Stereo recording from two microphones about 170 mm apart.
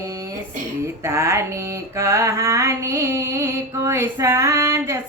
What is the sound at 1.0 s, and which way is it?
Speech, 15° right (ahead or behind).